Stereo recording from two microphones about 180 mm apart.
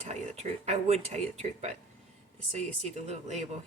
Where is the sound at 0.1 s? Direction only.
40° right (ahead or behind).